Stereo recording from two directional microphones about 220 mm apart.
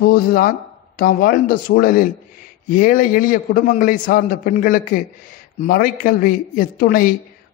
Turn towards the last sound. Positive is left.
turn(degrees=40)  # may be behind; listen again after turning